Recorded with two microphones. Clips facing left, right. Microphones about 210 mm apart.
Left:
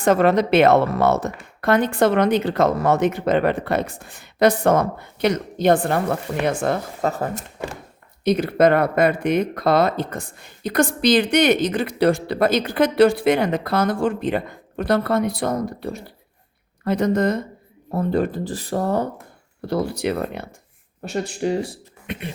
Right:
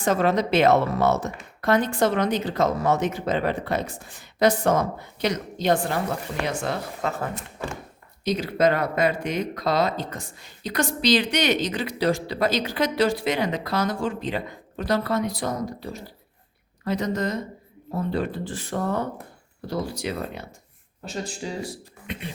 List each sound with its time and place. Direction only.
0.0 s speech: 60° left (ahead or behind); by 7.8 s 40° left (ahead or behind)
8.2 s speech: 55° left (ahead or behind); by 19.0 s 35° left (ahead or behind)
19.6 s speech: 60° left (ahead or behind)